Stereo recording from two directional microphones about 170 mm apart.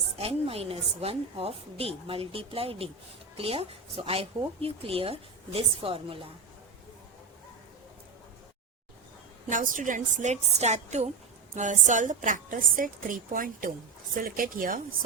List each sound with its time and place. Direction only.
0.2 s a woman's voice: 35° right (ahead or behind)
9.5 s a woman's voice: 50° right (ahead or behind)